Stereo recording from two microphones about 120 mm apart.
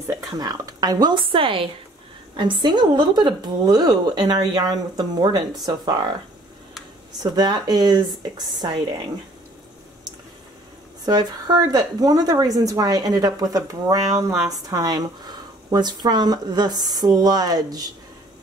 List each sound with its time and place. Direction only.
0.0 s a woman's voice: 30° right (ahead or behind)
7.3 s a woman's voice: 35° right (ahead or behind)
11.1 s a woman's voice: 35° right (ahead or behind)